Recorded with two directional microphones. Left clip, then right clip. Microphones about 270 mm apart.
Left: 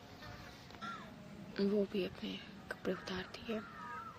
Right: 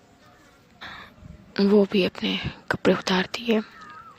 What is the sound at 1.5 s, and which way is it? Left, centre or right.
Speech, right.